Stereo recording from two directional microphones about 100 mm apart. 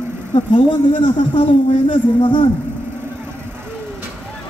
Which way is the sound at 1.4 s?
90° left.